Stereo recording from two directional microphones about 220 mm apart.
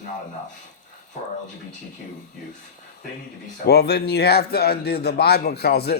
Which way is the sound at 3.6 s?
50° left (ahead or behind).